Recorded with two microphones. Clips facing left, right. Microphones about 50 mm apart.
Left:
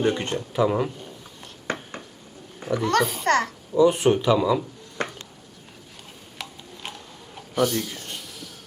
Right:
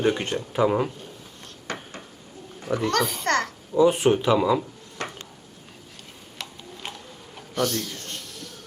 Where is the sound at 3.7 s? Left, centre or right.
Centre.